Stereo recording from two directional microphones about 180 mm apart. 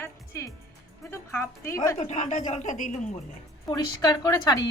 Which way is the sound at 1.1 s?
15° left (ahead or behind).